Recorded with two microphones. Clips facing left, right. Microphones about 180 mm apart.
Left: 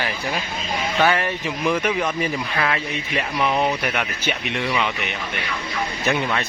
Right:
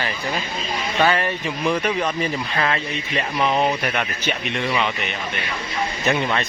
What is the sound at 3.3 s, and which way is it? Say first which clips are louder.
Speech: right 1 dB; 20° right (ahead or behind).